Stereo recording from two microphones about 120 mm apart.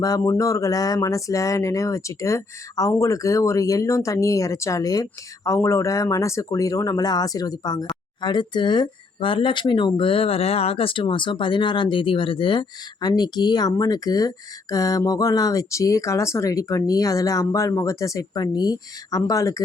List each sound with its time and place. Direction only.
0.0 s speech: 30° left (ahead or behind)